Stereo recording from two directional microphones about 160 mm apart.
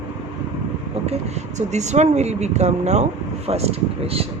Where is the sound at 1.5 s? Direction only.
45° right (ahead or behind).